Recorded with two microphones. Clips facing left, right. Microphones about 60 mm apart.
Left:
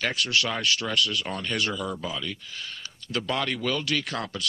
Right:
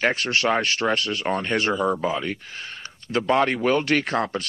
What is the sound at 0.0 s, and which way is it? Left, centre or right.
Speech, right.